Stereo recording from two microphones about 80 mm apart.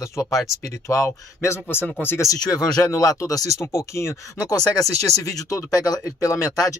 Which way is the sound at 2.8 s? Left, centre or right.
Left.